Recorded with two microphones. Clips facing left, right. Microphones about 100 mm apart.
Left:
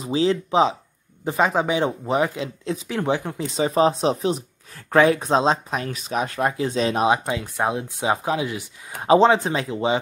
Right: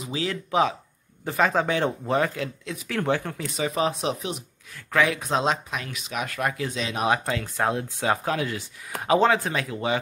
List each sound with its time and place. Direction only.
0.0 s speech: 30° left (ahead or behind)
7.1 s speech: 20° left (ahead or behind)